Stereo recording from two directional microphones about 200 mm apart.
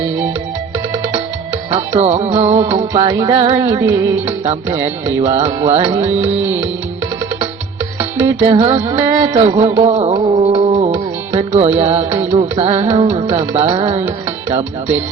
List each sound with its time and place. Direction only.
1.7 s music: 35° right (ahead or behind)
5.2 s music: 30° right (ahead or behind)
8.2 s music: 30° right (ahead or behind)